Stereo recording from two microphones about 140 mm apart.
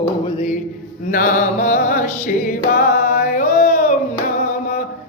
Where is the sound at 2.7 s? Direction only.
80° left.